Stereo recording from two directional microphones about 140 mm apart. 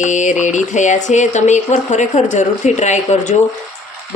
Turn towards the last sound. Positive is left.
turn(degrees=55)  # may be behind; listen again after turning